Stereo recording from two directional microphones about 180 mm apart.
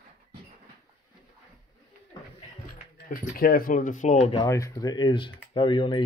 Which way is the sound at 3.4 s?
55° left (ahead or behind).